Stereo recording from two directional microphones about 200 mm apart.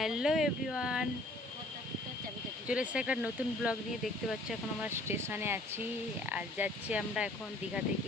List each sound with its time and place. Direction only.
0.0 s speech: 5° right (ahead or behind)
2.6 s speech: 5° right (ahead or behind)